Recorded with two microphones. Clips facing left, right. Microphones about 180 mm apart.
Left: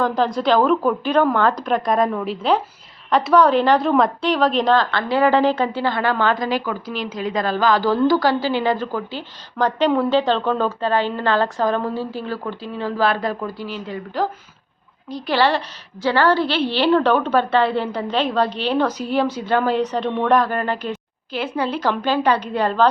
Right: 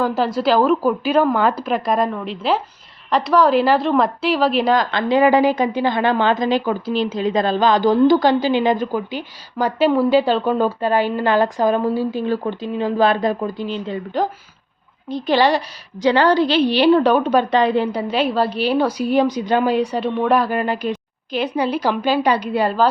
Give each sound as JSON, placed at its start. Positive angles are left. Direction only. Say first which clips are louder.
{"t": 0.0, "sound": "a woman's voice", "louder": "right 1 dB", "side_deg": -5}